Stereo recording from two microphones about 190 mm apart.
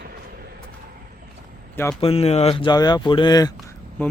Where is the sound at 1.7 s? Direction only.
15° left (ahead or behind).